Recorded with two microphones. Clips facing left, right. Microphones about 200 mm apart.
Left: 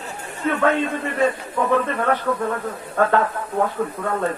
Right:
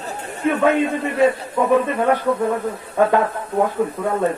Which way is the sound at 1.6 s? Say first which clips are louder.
Right 3 dB; 15° right (ahead or behind).